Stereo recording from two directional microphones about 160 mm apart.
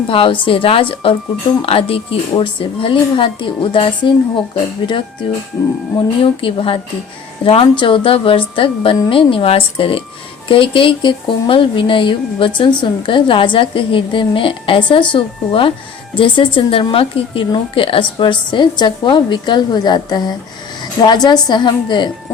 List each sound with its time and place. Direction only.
0.1 s a woman's voice: 35° left (ahead or behind)
5.2 s a woman's voice: 30° left (ahead or behind)